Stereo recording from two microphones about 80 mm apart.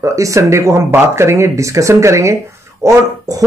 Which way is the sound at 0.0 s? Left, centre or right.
Right.